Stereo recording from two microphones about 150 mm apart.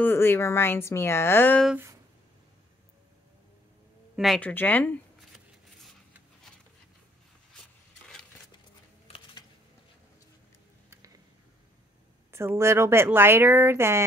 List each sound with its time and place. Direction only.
0.0 s a woman's voice: 15° left (ahead or behind)
4.4 s a woman's voice: 10° left (ahead or behind)
9.0 s a sound: 35° left (ahead or behind)
12.3 s speech: 20° right (ahead or behind)